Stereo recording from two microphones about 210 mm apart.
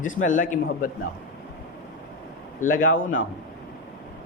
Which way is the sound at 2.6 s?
40° left (ahead or behind).